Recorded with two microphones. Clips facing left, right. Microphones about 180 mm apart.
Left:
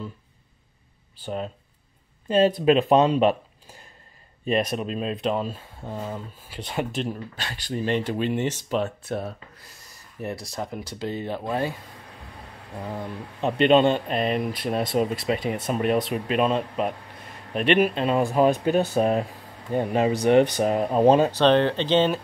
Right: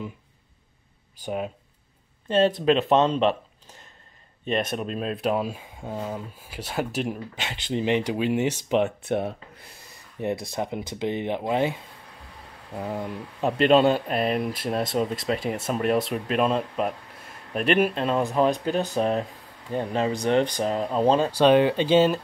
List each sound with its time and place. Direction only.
1.2 s speech: 10° right (ahead or behind)
2.2 s speech: 5° left (ahead or behind)
4.5 s speech: centre (ahead or behind); by 11.7 s 20° right (ahead or behind)
12.9 s speech: 15° right (ahead or behind)
13.5 s speech: centre (ahead or behind); by 21.3 s 15° left (ahead or behind)
21.3 s speech: 10° right (ahead or behind)